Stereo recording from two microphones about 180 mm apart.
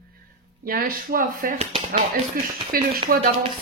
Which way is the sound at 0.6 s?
50° right (ahead or behind).